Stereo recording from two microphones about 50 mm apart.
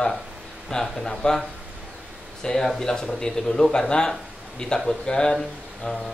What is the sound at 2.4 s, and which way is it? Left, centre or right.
Speech, centre.